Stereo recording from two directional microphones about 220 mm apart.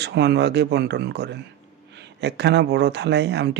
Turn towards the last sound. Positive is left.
turn(degrees=-50)  # may be behind; listen again after turning